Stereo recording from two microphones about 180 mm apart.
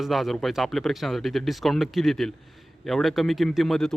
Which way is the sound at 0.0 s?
Centre (ahead or behind).